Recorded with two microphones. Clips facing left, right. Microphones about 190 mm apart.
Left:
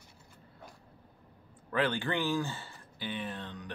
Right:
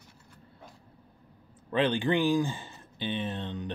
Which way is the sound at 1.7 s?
20° right (ahead or behind).